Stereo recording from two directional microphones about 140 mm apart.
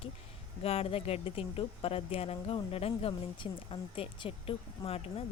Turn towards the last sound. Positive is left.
turn(degrees=45)  # may be behind; listen again after turning